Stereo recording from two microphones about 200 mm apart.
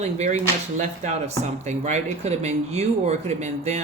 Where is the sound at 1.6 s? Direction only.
35° right (ahead or behind).